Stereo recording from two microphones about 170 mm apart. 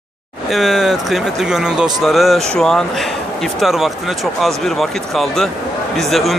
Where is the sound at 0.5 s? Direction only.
Centre (ahead or behind).